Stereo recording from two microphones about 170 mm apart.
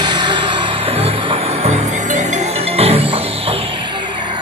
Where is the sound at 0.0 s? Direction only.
25° right (ahead or behind).